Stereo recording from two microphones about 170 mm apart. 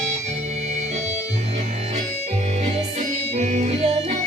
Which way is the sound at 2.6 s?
40° right (ahead or behind).